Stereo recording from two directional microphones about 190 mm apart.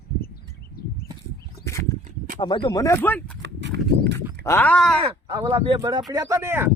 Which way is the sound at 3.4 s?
65° right (ahead or behind).